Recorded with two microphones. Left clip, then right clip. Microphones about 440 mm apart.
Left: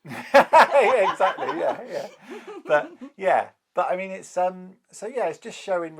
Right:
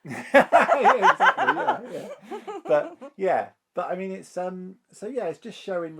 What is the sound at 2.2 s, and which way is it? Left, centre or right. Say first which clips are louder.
Speech: right 3 dB; left.